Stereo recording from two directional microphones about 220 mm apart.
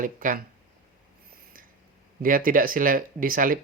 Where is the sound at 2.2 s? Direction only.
40° right (ahead or behind).